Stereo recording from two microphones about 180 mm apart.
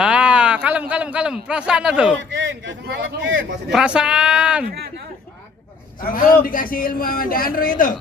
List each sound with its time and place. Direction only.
0.0 s a sound: 5° right (ahead or behind)
2.3 s a man's voice: 85° right
3.7 s speech: 5° right (ahead or behind)
4.6 s speech: 60° right (ahead or behind)
6.0 s a man's voice: 50° left (ahead or behind)